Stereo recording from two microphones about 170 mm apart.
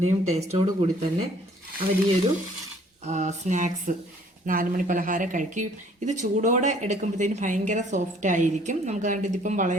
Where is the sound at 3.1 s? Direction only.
45° right (ahead or behind).